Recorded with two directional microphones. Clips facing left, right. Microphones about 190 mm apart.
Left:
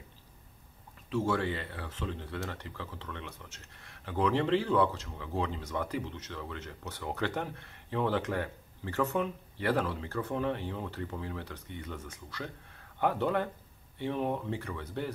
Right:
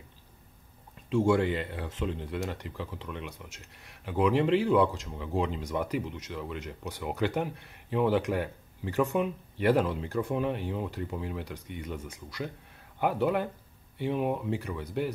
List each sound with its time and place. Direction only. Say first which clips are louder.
1.1 s speech: right 6 dB; 15° right (ahead or behind)